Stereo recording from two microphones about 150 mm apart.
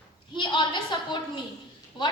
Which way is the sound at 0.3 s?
30° left (ahead or behind).